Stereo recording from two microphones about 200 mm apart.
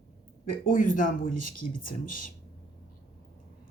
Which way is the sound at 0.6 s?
40° left (ahead or behind).